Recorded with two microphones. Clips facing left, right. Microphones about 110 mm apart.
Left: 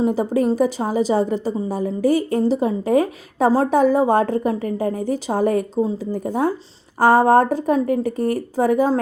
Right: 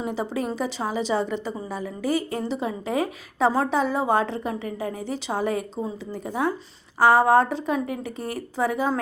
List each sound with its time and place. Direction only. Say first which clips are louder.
0.0 s a woman's voice: left 9 dB; 45° left (ahead or behind)